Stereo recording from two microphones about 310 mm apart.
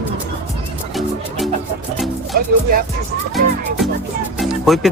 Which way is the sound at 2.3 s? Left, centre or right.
Right.